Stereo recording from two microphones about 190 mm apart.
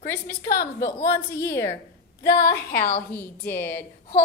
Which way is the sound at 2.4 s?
55° left (ahead or behind).